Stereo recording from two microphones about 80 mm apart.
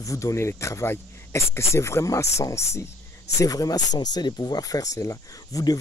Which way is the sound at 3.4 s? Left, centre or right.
Left.